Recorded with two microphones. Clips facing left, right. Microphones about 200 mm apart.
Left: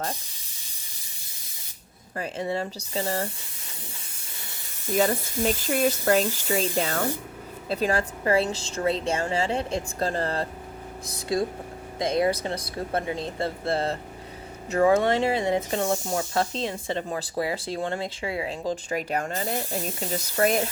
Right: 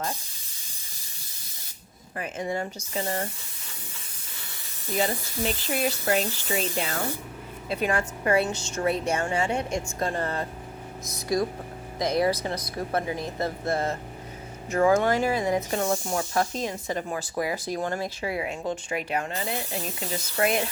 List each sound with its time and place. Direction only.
2.1 s speech: 30° left (ahead or behind)
5.4 s speech: 45° left (ahead or behind)